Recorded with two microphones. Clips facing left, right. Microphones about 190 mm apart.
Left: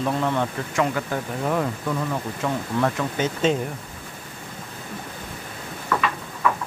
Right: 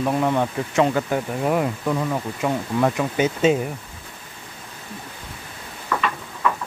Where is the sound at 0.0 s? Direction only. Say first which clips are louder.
Right 3 dB; 15° right (ahead or behind).